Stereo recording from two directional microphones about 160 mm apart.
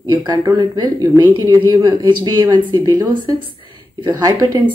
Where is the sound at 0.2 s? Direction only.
25° right (ahead or behind).